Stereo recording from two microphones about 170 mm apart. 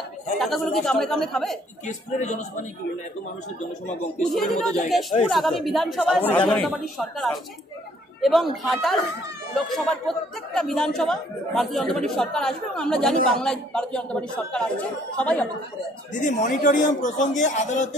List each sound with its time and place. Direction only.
0.4 s speech: centre (ahead or behind)
1.9 s a man's voice: 45° left (ahead or behind)
4.3 s speech: centre (ahead or behind)
16.1 s a man's voice: 45° left (ahead or behind)